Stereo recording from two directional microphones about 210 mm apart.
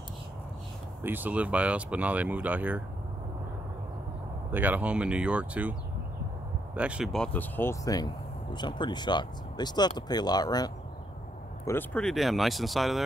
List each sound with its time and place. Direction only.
1.0 s speech: 10° right (ahead or behind)
4.5 s speech: 10° right (ahead or behind); by 10.7 s 20° left (ahead or behind)
11.6 s speech: 10° left (ahead or behind)